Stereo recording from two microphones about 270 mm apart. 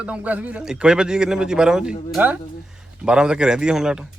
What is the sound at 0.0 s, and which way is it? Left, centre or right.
Speech, centre.